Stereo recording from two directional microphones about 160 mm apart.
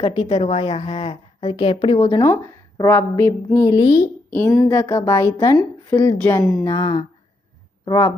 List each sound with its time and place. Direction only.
0.0 s a woman's voice: 40° left (ahead or behind)
2.0 s a woman's voice: 25° left (ahead or behind)
4.3 s a woman's voice: 10° left (ahead or behind)
4.7 s a woman's voice: 25° left (ahead or behind)